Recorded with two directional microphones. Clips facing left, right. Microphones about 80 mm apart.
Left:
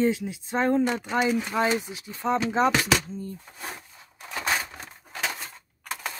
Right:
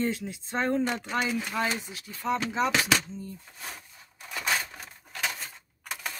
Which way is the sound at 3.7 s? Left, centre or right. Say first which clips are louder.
Left 3 dB; left.